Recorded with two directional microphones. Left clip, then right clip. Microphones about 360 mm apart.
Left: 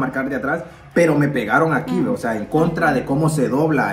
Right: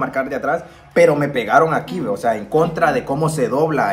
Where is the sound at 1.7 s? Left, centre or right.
Centre.